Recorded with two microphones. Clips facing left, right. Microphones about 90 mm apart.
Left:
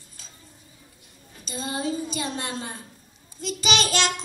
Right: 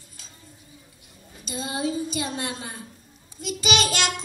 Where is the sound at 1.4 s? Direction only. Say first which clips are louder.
Right 1 dB; 35° left (ahead or behind).